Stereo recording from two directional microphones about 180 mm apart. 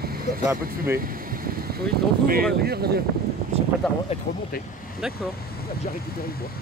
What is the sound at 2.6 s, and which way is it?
Speech, 60° right (ahead or behind).